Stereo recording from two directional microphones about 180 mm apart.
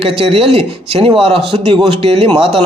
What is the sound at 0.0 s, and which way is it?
Speech, 35° right (ahead or behind).